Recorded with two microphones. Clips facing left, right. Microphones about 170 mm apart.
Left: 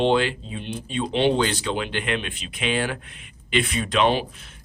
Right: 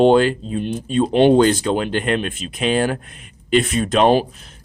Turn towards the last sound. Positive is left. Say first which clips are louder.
# right 7 dB
turn(degrees=-35)  # may be behind; listen again after turning